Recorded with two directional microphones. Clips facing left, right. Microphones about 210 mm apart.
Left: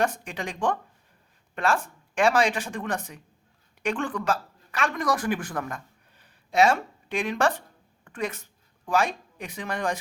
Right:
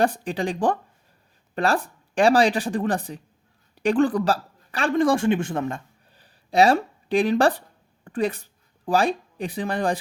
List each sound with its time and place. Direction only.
0.0 s speech: 35° right (ahead or behind)